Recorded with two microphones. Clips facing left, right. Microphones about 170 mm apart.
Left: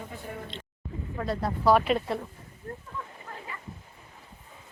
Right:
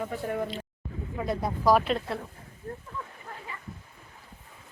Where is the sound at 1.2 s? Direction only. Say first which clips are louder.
Even; 15° right (ahead or behind).